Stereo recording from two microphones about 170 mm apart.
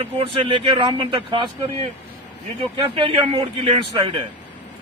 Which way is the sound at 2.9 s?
35° right (ahead or behind).